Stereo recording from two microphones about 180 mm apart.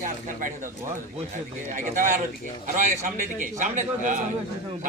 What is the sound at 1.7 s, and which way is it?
Speech, 45° right (ahead or behind).